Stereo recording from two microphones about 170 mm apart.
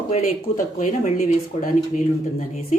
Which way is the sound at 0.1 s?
45° left (ahead or behind).